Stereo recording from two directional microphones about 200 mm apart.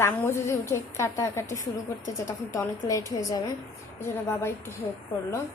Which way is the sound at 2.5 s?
15° left (ahead or behind).